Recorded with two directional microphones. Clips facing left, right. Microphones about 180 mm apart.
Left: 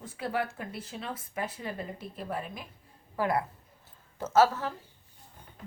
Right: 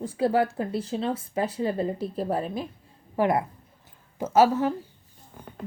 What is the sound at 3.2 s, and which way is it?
Speech, 20° right (ahead or behind).